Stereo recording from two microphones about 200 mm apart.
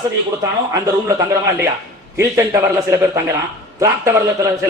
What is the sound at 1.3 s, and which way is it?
Speech, 15° right (ahead or behind).